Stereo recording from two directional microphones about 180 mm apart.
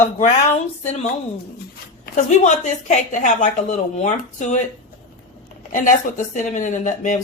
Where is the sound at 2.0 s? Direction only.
40° left (ahead or behind).